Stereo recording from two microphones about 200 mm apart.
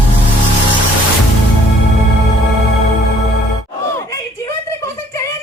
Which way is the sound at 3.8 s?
15° left (ahead or behind).